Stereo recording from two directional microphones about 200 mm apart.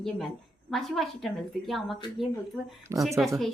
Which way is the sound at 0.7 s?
Centre (ahead or behind).